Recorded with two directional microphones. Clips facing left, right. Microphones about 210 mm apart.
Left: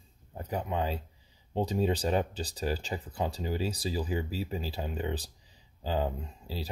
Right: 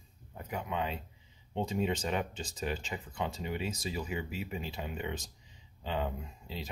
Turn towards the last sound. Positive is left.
turn(degrees=35)  # may be behind; listen again after turning